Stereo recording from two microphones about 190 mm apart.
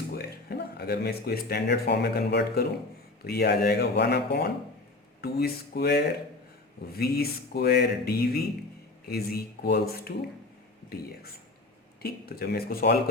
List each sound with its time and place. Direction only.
0.1 s speech: 55° left (ahead or behind)